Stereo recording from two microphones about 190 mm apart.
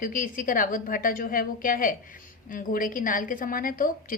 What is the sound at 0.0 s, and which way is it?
A woman's voice, 45° left (ahead or behind).